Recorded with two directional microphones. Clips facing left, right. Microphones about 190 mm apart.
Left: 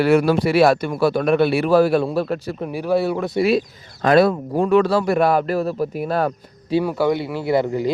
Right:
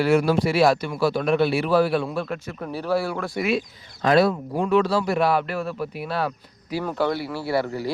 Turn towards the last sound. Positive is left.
turn(degrees=20)  # may be behind; listen again after turning